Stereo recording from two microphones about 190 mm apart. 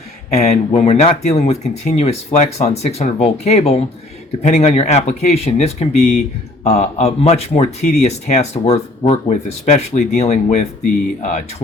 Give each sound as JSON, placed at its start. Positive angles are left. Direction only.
{"t": 0.3, "sound": "speech", "side_deg": 35}